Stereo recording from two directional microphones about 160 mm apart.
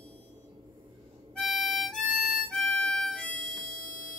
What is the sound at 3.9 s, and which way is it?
Music, 55° left (ahead or behind).